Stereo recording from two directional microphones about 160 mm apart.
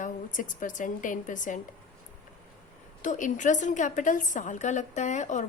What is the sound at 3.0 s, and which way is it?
A woman's voice, 55° left (ahead or behind).